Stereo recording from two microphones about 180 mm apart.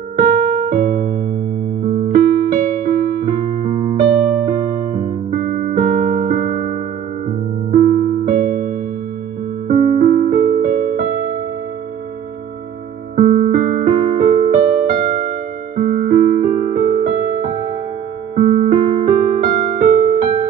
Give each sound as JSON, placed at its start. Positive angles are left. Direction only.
{"t": 0.2, "sound": "electric piano", "side_deg": -55}
{"t": 5.3, "sound": "music", "side_deg": -50}
{"t": 8.3, "sound": "music", "side_deg": -45}
{"t": 9.7, "sound": "electric piano", "side_deg": -45}
{"t": 13.1, "sound": "electric piano", "side_deg": -45}